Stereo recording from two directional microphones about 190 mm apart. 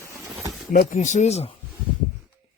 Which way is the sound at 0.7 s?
45° left (ahead or behind).